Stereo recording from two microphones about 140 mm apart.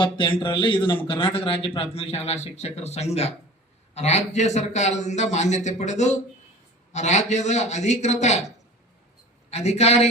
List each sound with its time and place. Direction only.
0.0 s a man's voice: 35° left (ahead or behind); by 8.4 s 55° left (ahead or behind)
9.5 s speech: 50° left (ahead or behind)